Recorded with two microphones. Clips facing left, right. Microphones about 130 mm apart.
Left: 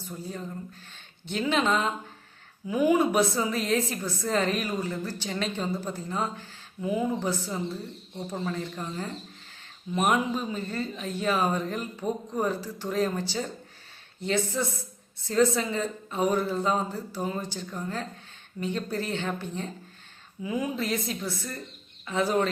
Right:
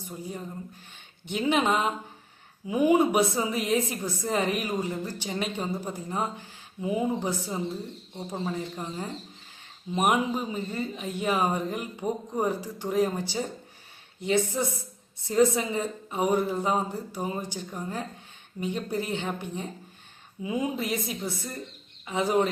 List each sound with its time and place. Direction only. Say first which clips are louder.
0.0 s a woman's voice: even; 15° right (ahead or behind)